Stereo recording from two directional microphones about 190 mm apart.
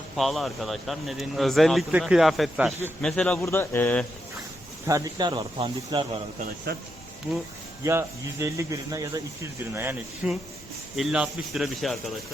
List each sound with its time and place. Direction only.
0.2 s speech: centre (ahead or behind)
2.7 s a man's voice: 10° left (ahead or behind)
4.9 s speech: 20° right (ahead or behind)
6.7 s speech: 55° right (ahead or behind)
7.9 s speech: 15° right (ahead or behind)